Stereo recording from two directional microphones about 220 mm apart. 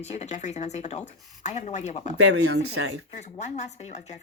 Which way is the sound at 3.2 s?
30° left (ahead or behind).